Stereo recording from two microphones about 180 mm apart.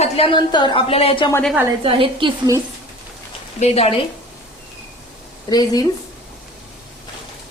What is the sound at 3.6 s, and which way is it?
Speech, 35° left (ahead or behind).